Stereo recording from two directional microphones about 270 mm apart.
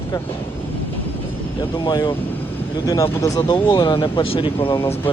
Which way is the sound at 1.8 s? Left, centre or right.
Centre.